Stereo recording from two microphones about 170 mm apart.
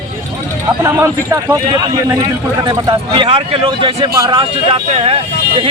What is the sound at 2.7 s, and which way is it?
Speech, 25° right (ahead or behind).